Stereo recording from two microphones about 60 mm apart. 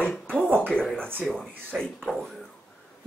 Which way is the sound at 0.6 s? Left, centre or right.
Centre.